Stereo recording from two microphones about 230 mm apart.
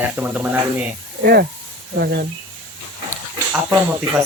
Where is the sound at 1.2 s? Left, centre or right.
Right.